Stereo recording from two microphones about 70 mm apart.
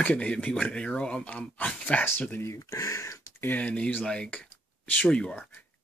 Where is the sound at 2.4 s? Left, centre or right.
Left.